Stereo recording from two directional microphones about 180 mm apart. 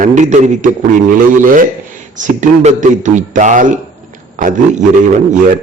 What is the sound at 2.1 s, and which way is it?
A man's voice, 45° right (ahead or behind).